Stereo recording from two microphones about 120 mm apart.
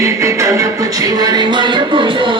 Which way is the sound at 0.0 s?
25° right (ahead or behind).